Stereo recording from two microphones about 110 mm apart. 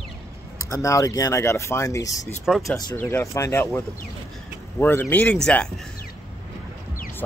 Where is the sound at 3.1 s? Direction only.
25° left (ahead or behind); by 5.8 s 5° left (ahead or behind).